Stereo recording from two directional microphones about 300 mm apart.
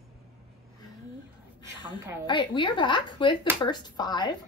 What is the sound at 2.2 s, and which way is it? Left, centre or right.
Speech, centre.